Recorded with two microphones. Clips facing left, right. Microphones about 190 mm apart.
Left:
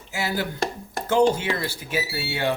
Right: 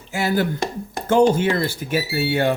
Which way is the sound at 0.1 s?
50° right (ahead or behind).